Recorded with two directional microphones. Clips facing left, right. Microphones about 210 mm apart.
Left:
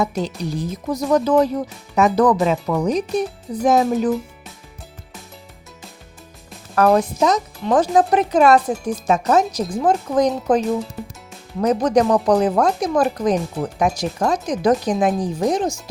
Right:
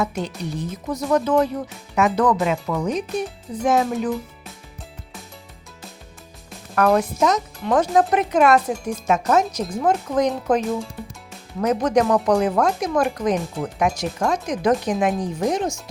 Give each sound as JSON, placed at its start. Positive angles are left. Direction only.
{"t": 0.0, "sound": "speech", "side_deg": 35}
{"t": 6.7, "sound": "speech", "side_deg": 30}
{"t": 11.6, "sound": "speech", "side_deg": 35}